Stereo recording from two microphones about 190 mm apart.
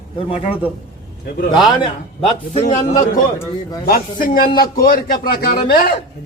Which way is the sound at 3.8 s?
50° left (ahead or behind).